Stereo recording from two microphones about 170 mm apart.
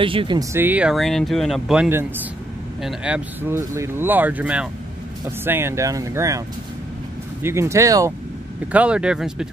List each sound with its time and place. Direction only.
0.0 s speech: 30° right (ahead or behind)
0.4 s speech: 15° right (ahead or behind)
7.4 s speech: 15° right (ahead or behind)
8.7 s speech: 5° right (ahead or behind)